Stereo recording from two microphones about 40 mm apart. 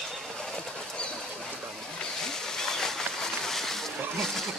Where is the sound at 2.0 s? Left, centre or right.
Centre.